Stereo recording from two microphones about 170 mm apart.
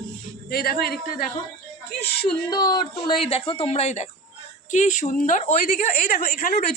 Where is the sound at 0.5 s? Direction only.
65° left (ahead or behind).